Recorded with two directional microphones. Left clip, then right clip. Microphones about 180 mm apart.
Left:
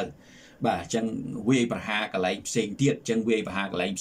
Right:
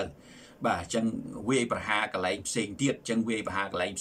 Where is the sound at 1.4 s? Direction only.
15° left (ahead or behind).